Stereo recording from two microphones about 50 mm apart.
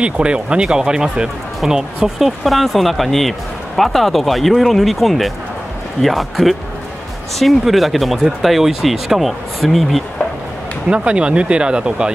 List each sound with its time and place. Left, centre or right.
0.0 s speech: right; by 10.0 s centre
10.9 s speech: right